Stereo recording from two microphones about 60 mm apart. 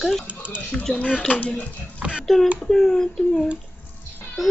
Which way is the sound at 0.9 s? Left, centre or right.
Centre.